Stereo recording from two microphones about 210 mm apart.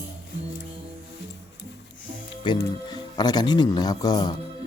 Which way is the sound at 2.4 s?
15° left (ahead or behind).